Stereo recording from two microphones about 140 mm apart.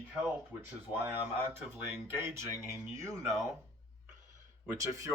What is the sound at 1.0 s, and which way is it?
Speech, 15° right (ahead or behind).